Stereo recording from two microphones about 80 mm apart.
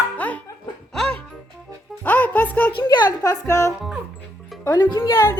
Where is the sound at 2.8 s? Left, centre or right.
Left.